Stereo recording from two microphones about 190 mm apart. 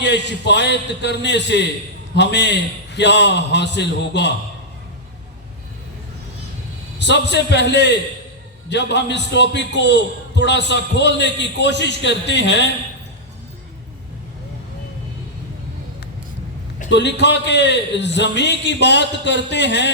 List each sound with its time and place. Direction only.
0.0 s a man's voice: 65° left (ahead or behind)
7.0 s a man's voice: 65° left (ahead or behind)
16.9 s a man's voice: 65° left (ahead or behind)